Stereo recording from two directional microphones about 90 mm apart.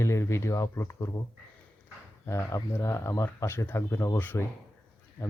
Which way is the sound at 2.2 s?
35° left (ahead or behind).